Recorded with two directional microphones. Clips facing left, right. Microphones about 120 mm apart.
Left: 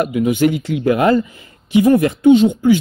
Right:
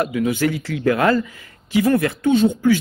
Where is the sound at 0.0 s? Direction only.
20° left (ahead or behind).